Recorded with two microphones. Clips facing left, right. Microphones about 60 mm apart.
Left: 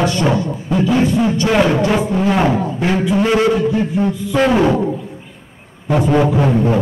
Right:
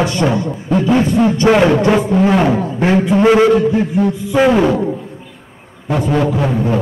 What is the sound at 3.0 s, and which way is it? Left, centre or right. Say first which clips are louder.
A man's voice: right 4 dB; centre.